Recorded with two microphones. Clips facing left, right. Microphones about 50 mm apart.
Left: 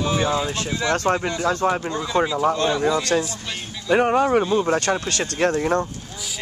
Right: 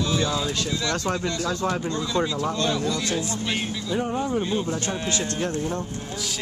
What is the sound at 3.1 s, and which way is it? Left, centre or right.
Speech, left.